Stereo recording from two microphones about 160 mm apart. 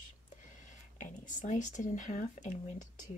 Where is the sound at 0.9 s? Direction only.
55° left (ahead or behind).